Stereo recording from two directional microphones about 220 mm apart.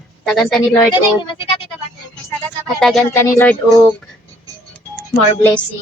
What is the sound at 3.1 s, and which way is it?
Speech, 10° left (ahead or behind).